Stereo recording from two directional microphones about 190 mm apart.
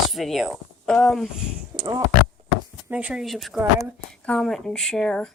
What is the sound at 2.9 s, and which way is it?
Speech, 5° right (ahead or behind).